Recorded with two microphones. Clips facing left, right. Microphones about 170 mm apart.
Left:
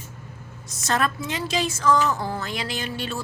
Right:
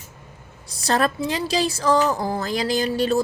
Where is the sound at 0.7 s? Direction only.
35° right (ahead or behind).